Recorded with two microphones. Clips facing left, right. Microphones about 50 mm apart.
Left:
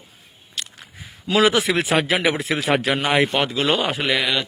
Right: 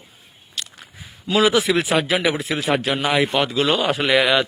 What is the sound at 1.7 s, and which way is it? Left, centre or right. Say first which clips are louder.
Speech: right 1 dB; left.